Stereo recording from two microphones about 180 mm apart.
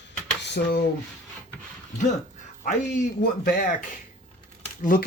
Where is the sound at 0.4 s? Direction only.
65° left (ahead or behind).